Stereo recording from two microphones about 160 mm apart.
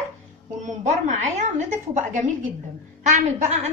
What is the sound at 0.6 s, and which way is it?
A woman's voice, 50° right (ahead or behind).